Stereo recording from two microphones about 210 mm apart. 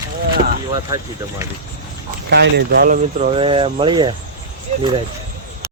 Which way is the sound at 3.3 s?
25° right (ahead or behind).